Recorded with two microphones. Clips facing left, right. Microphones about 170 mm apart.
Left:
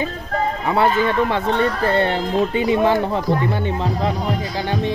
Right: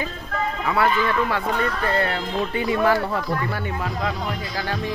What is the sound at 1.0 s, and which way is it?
Speech, 25° left (ahead or behind).